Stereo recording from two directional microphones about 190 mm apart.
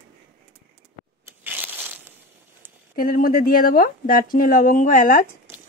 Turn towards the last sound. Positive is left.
turn(degrees=45)  # may be behind; listen again after turning